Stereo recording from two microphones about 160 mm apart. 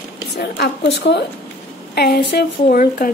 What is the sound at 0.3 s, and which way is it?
A woman's voice, 90° left.